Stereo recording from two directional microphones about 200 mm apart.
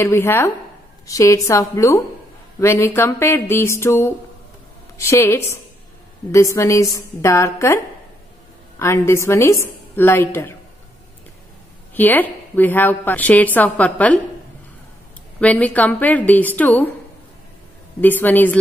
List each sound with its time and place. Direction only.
0.0 s a woman's voice: 15° left (ahead or behind)
11.9 s a woman's voice: 10° left (ahead or behind)
15.4 s a woman's voice: 5° left (ahead or behind)
18.0 s a woman's voice: 10° left (ahead or behind)